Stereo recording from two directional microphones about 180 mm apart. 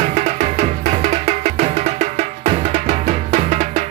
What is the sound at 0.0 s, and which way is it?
Music, 40° right (ahead or behind).